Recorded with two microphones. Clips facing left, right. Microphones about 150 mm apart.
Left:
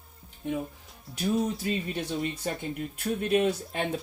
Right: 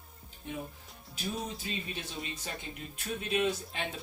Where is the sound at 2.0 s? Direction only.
60° left (ahead or behind).